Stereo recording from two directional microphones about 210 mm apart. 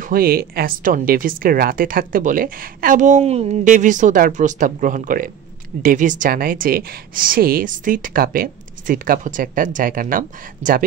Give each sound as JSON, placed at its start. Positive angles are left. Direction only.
{"t": 0.0, "sound": "a woman's voice", "side_deg": -45}